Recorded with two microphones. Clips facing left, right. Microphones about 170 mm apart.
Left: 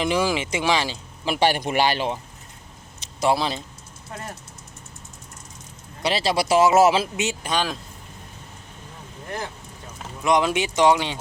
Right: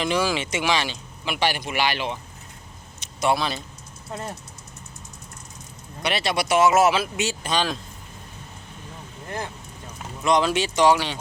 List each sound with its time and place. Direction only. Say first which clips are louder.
0.0 s speech: left 1 dB; 20° left (ahead or behind)
1.2 s speech: left 4 dB; 40° left (ahead or behind)
3.2 s speech: left 1 dB; 30° left (ahead or behind)
6.0 s speech: left 2 dB; 30° left (ahead or behind)
7.5 s speech: right 1 dB; 10° left (ahead or behind)
10.2 s speech: even; 15° left (ahead or behind)